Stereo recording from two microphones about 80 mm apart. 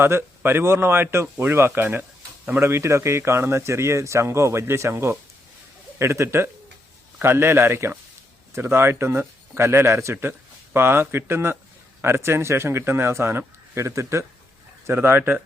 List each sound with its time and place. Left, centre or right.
0.0 s a man's voice: right